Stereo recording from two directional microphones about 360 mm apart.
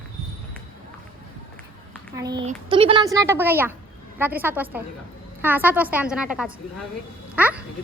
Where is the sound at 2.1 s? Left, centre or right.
Centre.